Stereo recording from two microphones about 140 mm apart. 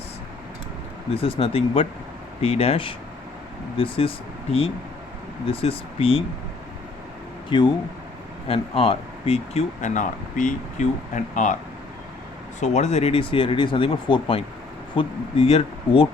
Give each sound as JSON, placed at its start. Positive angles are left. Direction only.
{"t": 1.1, "sound": "speech", "side_deg": 40}
{"t": 5.5, "sound": "speech", "side_deg": 40}
{"t": 7.5, "sound": "speech", "side_deg": 35}
{"t": 12.5, "sound": "speech", "side_deg": 55}